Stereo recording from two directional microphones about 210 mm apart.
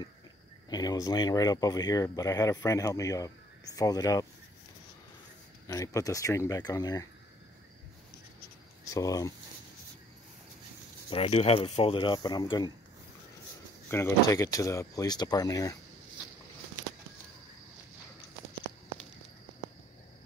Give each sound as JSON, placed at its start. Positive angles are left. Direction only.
{"t": 0.7, "sound": "speech", "side_deg": 20}
{"t": 5.7, "sound": "speech", "side_deg": 15}
{"t": 8.9, "sound": "speech", "side_deg": 15}
{"t": 11.1, "sound": "speech", "side_deg": 30}
{"t": 13.8, "sound": "speech", "side_deg": 10}